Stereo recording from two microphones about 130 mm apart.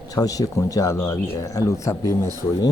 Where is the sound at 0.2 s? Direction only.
25° left (ahead or behind).